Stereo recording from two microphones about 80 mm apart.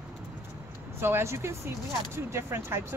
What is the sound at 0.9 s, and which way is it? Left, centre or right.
Speech, right.